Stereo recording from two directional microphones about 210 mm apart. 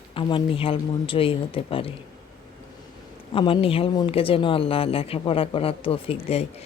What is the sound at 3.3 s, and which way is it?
Speech, 25° left (ahead or behind).